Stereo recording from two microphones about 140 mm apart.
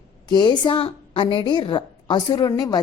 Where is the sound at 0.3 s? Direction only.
30° left (ahead or behind).